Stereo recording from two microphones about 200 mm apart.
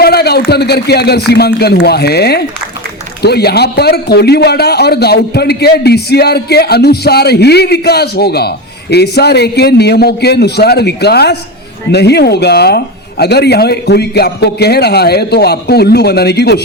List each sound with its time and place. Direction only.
0.0 s a man's voice: 55° left (ahead or behind)